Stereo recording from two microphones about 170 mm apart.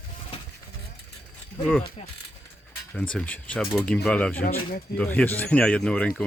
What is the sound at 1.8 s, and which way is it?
Speech, 40° left (ahead or behind).